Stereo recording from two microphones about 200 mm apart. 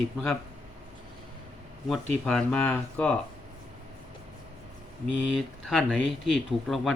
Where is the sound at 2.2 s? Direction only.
10° left (ahead or behind).